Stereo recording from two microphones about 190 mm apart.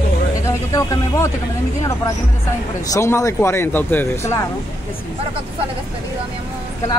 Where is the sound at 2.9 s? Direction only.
15° left (ahead or behind).